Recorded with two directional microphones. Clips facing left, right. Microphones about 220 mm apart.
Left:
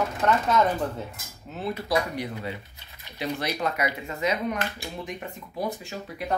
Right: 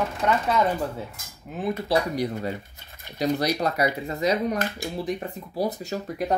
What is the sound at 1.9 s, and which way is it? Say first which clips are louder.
Speech: right 3 dB; 40° right (ahead or behind).